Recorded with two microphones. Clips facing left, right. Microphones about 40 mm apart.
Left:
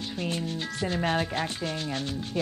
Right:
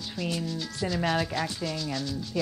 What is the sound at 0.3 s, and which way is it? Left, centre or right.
Speech, left.